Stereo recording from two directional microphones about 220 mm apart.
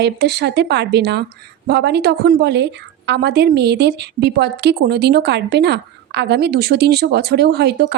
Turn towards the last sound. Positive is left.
turn(degrees=-50)  # may be behind; listen again after turning